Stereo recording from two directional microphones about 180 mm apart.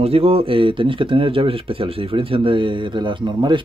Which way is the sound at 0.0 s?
35° right (ahead or behind).